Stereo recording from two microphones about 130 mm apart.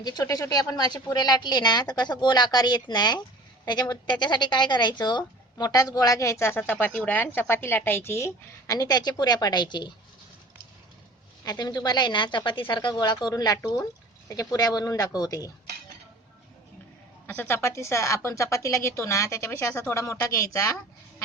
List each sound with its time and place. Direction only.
0.0 s a woman's voice: 30° left (ahead or behind)
11.4 s a woman's voice: 30° left (ahead or behind)
17.2 s speech: 15° left (ahead or behind)